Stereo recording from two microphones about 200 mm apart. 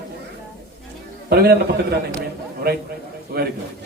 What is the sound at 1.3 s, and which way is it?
A man's voice, 55° right (ahead or behind).